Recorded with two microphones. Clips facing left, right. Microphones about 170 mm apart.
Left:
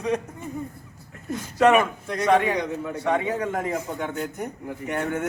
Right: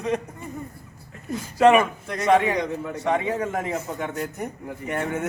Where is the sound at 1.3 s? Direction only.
5° right (ahead or behind).